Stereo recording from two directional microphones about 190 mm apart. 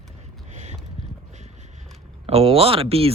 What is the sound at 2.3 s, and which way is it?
Speech, 30° right (ahead or behind).